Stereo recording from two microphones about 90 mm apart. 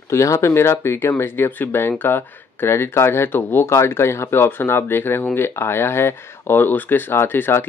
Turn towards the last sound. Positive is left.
turn(degrees=25)  # may be behind; listen again after turning